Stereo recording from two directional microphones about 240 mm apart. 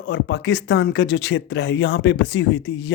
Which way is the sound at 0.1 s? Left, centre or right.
Left.